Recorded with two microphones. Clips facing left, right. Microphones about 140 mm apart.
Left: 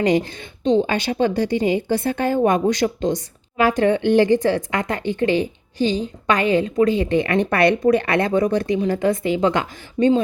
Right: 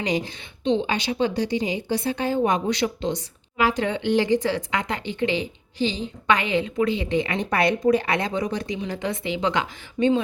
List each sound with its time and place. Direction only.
0.0 s speech: 50° left (ahead or behind)